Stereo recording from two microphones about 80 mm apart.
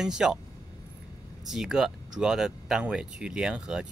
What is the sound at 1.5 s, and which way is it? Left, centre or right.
Speech, centre.